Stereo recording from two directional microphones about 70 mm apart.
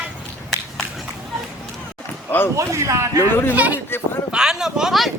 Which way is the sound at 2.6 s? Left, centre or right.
Right.